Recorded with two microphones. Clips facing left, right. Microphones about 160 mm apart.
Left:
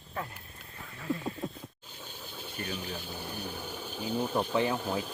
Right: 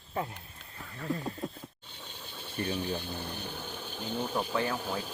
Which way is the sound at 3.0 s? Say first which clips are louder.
Even; 5° left (ahead or behind).